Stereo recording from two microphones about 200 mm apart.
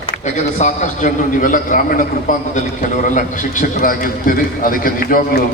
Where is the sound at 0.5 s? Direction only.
35° left (ahead or behind).